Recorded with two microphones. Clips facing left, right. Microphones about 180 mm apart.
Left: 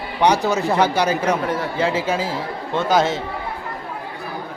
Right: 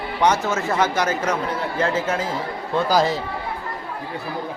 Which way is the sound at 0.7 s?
35° left (ahead or behind).